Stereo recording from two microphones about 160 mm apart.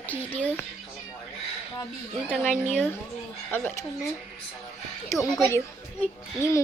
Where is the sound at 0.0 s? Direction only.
10° left (ahead or behind).